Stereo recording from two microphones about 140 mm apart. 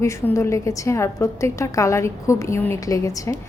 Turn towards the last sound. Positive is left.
turn(degrees=25)  # may be behind; listen again after turning